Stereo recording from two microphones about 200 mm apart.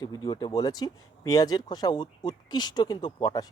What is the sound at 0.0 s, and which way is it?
Speech, 20° left (ahead or behind).